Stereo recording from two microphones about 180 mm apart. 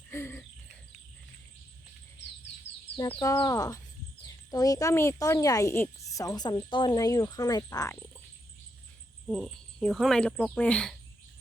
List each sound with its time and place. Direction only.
0.1 s a sound: 15° left (ahead or behind)
3.2 s speech: 20° left (ahead or behind)
9.2 s speech: 5° left (ahead or behind)